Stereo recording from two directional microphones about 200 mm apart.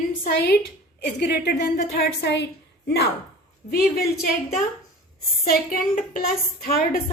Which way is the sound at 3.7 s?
50° left (ahead or behind).